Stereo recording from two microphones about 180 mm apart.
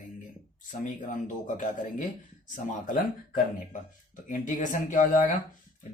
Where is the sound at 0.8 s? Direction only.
45° left (ahead or behind).